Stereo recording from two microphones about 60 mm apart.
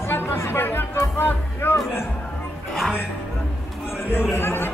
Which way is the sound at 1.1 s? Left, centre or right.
Left.